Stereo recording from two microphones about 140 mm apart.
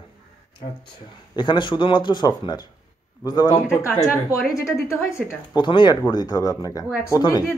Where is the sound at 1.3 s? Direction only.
35° left (ahead or behind).